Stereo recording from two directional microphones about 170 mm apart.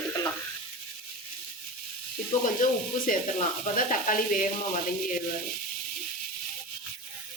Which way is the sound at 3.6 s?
50° left (ahead or behind).